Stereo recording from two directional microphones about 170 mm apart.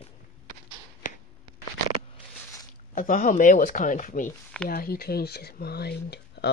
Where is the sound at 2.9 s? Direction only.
50° left (ahead or behind).